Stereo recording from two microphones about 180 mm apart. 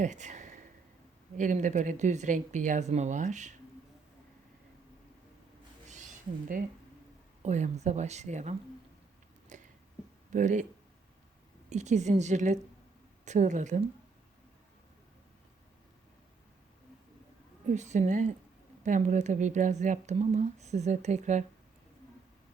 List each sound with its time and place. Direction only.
0.0 s a sound: 40° right (ahead or behind)
1.4 s speech: 45° right (ahead or behind)
7.4 s speech: 40° right (ahead or behind)
9.5 s a sound: 45° right (ahead or behind)
10.3 s speech: 45° right (ahead or behind)
11.7 s speech: 40° right (ahead or behind)
17.7 s speech: 40° right (ahead or behind)